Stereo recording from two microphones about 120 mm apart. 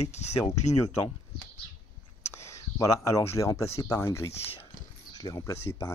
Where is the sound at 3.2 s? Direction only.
25° left (ahead or behind).